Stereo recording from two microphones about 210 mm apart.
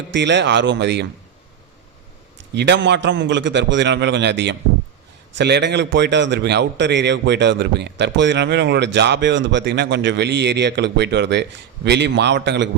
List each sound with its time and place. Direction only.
0.1 s a man's voice: 55° right (ahead or behind)
2.6 s a man's voice: 55° right (ahead or behind)